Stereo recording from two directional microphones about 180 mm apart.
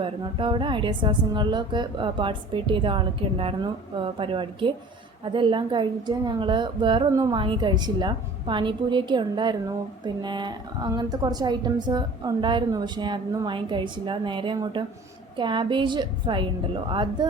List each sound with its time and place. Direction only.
0.0 s a woman's voice: 30° right (ahead or behind)